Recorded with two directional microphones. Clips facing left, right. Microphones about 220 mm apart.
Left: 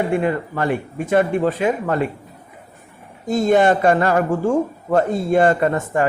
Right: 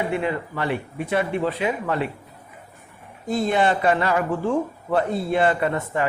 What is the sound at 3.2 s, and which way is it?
Speech, 45° left (ahead or behind).